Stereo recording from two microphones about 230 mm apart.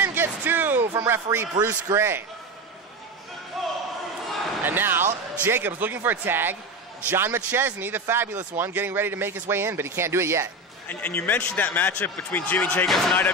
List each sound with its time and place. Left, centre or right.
0.0 s a sound: centre
1.6 s speech: centre
4.6 s speech: centre
10.9 s a man's voice: centre